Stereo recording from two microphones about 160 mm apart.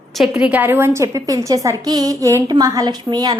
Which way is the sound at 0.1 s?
5° right (ahead or behind).